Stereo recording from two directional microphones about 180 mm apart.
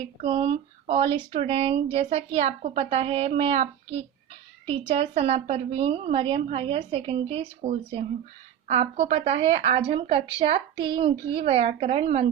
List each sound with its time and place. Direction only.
0.2 s speech: 30° right (ahead or behind)